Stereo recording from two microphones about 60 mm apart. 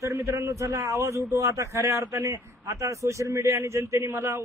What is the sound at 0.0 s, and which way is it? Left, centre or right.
A man's voice, right.